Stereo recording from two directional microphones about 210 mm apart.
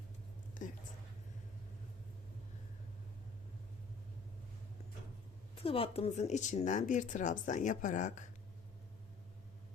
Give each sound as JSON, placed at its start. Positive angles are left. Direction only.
{"t": 0.6, "sound": "speech", "side_deg": 40}
{"t": 5.5, "sound": "speech", "side_deg": 25}